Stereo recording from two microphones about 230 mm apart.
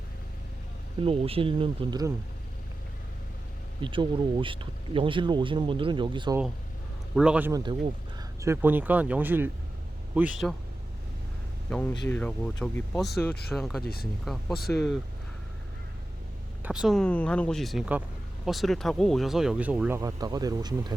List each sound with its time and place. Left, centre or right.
1.0 s speech: right
3.8 s speech: right
7.2 s speech: centre
11.7 s speech: centre
13.8 s speech: left
14.7 s speech: centre
16.6 s speech: centre
20.0 s speech: centre